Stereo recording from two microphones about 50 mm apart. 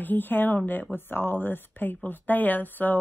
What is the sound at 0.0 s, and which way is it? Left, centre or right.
Speech, left.